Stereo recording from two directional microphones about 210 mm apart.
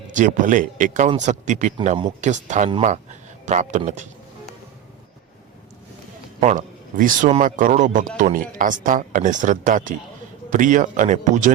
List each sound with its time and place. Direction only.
0.1 s a man's voice: 35° right (ahead or behind)
6.4 s speech: 35° right (ahead or behind)